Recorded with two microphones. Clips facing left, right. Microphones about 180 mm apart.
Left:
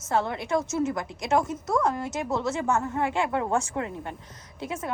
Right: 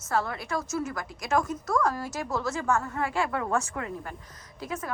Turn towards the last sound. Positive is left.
turn(degrees=25)  # may be behind; listen again after turning